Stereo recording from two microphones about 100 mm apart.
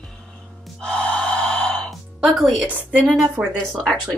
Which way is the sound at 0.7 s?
10° left (ahead or behind).